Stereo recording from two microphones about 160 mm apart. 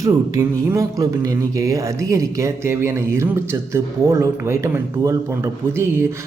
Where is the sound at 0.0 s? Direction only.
20° right (ahead or behind).